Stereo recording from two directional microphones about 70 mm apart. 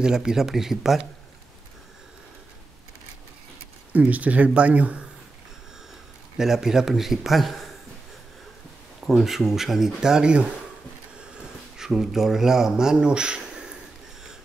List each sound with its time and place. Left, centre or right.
0.0 s speech: centre
3.9 s speech: right
6.3 s speech: centre
9.0 s speech: centre